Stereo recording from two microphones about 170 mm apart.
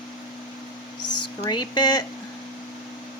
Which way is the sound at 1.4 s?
25° left (ahead or behind).